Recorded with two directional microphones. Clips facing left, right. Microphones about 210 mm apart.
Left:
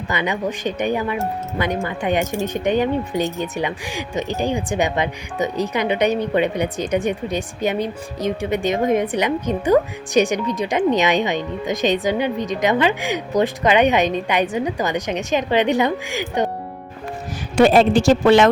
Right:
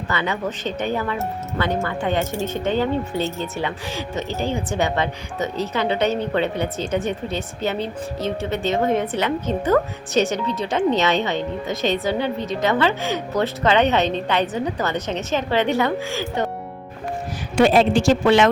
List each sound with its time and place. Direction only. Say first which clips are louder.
0.1 s speech: left 2 dB; 15° left (ahead or behind)
17.6 s a woman's voice: left 2 dB; 45° left (ahead or behind)